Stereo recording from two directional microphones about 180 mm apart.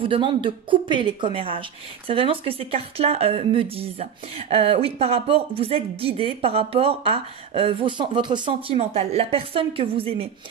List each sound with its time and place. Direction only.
0.0 s speech: 30° right (ahead or behind)